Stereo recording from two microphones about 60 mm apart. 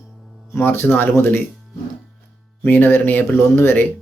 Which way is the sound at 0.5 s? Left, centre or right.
Left.